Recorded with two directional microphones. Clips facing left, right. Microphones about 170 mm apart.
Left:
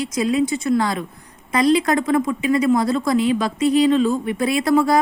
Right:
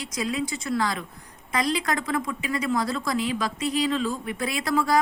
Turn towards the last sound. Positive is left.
turn(degrees=25)  # may be behind; listen again after turning